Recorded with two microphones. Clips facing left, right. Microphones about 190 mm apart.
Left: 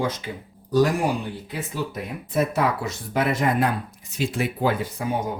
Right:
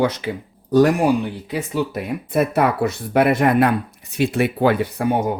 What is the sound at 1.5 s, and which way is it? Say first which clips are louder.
Speech: right 8 dB; 70° right (ahead or behind).